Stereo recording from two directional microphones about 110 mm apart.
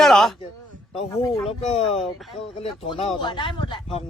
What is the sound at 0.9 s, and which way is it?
Speech, 60° left (ahead or behind).